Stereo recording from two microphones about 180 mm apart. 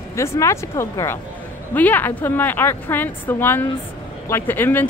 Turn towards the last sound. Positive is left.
turn(degrees=10)  # may be behind; listen again after turning